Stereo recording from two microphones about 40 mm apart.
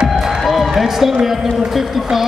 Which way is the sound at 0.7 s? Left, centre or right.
Centre.